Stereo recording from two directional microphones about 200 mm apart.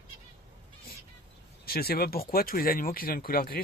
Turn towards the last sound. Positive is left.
turn(degrees=50)  # may be behind; listen again after turning